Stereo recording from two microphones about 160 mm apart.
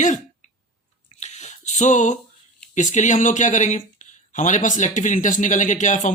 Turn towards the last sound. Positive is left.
turn(degrees=50)  # may be behind; listen again after turning